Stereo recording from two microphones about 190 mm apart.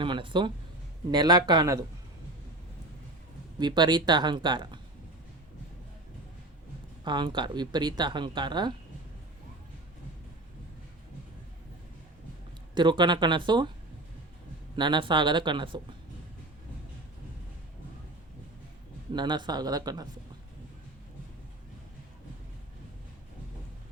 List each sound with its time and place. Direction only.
0.0 s speech: 25° right (ahead or behind)
3.6 s speech: 20° right (ahead or behind)
7.0 s speech: 25° right (ahead or behind)
12.7 s speech: 25° right (ahead or behind)
14.8 s speech: 25° right (ahead or behind)
19.1 s speech: 25° right (ahead or behind)